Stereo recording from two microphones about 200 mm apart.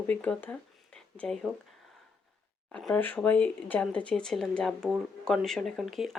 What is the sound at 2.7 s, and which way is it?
Speech, 5° left (ahead or behind).